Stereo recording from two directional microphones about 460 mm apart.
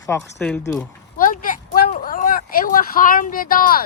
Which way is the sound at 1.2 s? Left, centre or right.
Centre.